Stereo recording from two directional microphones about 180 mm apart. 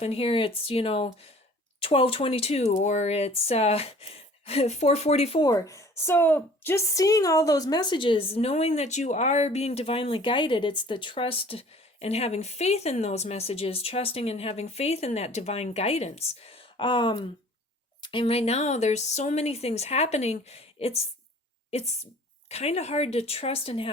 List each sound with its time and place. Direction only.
0.0 s a woman's voice: 30° left (ahead or behind)
5.4 s a woman's voice: 20° left (ahead or behind)